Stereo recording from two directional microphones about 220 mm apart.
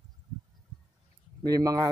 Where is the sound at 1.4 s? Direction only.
15° right (ahead or behind).